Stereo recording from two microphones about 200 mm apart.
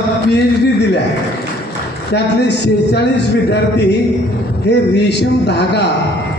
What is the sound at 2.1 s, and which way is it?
Speech, 55° left (ahead or behind).